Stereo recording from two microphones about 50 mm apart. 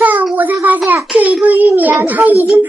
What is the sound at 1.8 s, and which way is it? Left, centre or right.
Speech, right.